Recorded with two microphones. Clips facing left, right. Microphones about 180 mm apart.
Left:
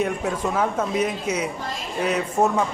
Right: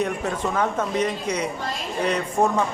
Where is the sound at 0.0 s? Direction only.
5° left (ahead or behind).